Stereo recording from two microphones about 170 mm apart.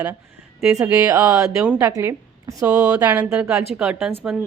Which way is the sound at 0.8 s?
20° right (ahead or behind).